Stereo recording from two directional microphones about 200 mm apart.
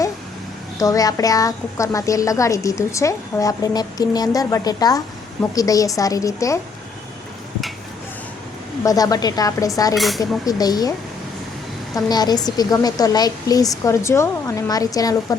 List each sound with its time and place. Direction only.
0.8 s a woman's voice: 15° left (ahead or behind)
8.8 s a woman's voice: 15° left (ahead or behind)
9.9 s speech: centre (ahead or behind)
10.2 s speech: 20° left (ahead or behind)
11.9 s a woman's voice: 20° left (ahead or behind)